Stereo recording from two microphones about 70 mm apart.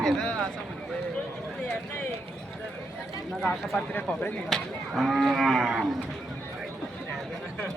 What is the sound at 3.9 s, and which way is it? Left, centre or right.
Speech, left.